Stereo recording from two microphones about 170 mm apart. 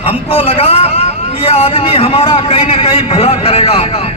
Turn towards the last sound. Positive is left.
turn(degrees=35)  # may be behind; listen again after turning